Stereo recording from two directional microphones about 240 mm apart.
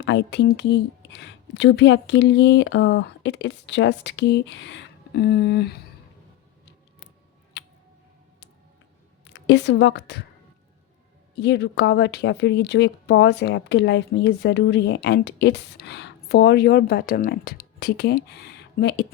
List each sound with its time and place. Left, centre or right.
0.0 s speech: left
9.2 s a woman's voice: left
11.3 s speech: left